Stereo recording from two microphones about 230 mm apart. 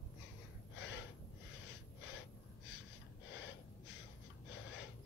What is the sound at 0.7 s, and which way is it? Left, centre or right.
Gasp, left.